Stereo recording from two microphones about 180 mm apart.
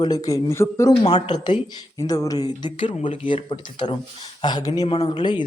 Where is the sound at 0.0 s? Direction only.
20° left (ahead or behind).